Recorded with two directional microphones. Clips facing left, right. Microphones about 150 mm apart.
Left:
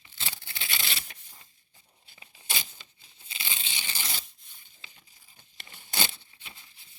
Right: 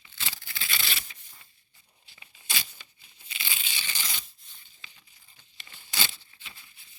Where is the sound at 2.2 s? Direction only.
20° left (ahead or behind).